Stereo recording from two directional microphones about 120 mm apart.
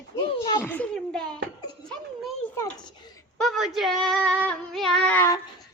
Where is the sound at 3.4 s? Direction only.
Centre (ahead or behind).